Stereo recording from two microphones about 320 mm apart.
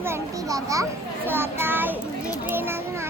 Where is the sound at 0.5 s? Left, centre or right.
Centre.